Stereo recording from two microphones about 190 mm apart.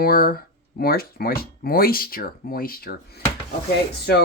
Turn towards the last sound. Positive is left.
turn(degrees=55)  # may be behind; listen again after turning